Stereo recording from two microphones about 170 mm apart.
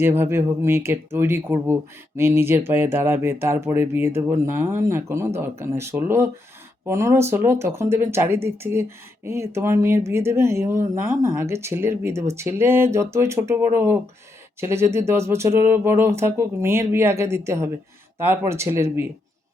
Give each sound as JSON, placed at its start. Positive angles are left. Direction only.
{"t": 0.0, "sound": "speech", "side_deg": -15}